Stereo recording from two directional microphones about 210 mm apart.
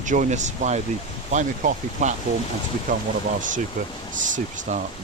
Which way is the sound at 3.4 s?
40° right (ahead or behind).